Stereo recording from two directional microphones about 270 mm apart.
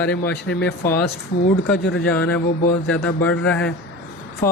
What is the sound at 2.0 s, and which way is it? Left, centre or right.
Speech, centre.